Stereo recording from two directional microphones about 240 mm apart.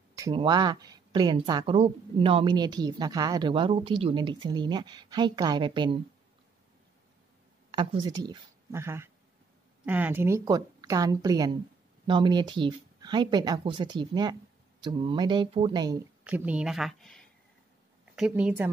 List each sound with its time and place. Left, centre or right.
0.1 s speech: centre
7.7 s a woman's voice: right
16.3 s a woman's voice: centre